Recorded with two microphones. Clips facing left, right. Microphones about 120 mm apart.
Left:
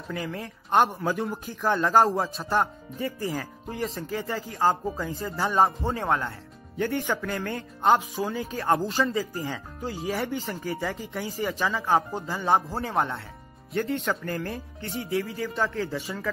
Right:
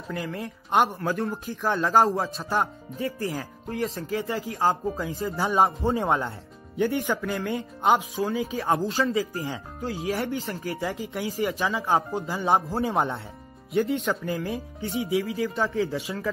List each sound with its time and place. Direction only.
0.1 s speech: centre (ahead or behind)
5.9 s speech: 20° right (ahead or behind)
6.8 s speech: centre (ahead or behind)